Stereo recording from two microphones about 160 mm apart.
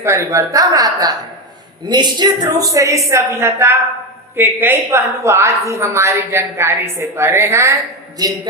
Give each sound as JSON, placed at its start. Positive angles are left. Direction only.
{"t": 0.0, "sound": "a woman's voice", "side_deg": -20}